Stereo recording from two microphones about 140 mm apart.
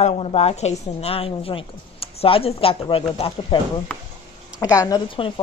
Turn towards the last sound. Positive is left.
turn(degrees=40)  # may be behind; listen again after turning